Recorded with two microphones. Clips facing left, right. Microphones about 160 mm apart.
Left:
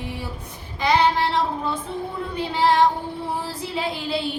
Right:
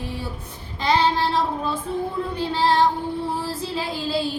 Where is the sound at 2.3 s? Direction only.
20° left (ahead or behind).